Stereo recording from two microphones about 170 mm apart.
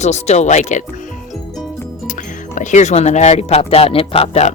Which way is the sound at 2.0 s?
50° left (ahead or behind).